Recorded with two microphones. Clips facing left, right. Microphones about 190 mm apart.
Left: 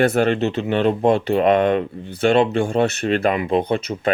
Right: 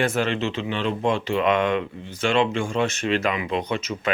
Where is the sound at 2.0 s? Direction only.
60° left (ahead or behind).